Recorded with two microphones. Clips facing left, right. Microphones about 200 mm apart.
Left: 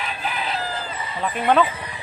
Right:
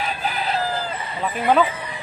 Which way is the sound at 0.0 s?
40° right (ahead or behind).